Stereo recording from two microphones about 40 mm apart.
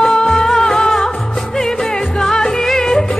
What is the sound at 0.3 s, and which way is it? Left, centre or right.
Music, centre.